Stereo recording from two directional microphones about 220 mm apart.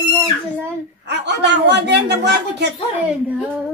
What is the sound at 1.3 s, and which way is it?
Speech, 50° right (ahead or behind).